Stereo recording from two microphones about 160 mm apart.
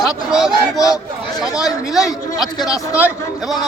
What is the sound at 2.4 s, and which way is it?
Speech, 25° left (ahead or behind).